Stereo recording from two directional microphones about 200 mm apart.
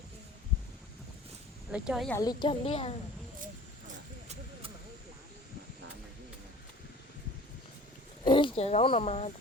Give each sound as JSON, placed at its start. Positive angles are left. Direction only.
{"t": 1.7, "sound": "a woman's voice", "side_deg": -5}
{"t": 2.1, "sound": "speech", "side_deg": 20}
{"t": 8.2, "sound": "speech", "side_deg": 25}